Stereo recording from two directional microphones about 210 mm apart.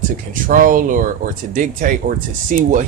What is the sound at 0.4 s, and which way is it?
Speech, 40° right (ahead or behind).